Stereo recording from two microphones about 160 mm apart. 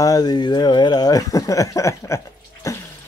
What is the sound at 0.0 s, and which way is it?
Speech, 25° left (ahead or behind).